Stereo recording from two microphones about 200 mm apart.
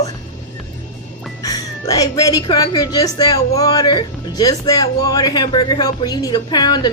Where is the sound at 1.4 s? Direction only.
20° left (ahead or behind).